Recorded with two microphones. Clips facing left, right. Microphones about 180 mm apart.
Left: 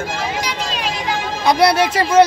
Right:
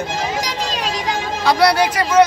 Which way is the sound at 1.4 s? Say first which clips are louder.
Left 1 dB; 20° left (ahead or behind).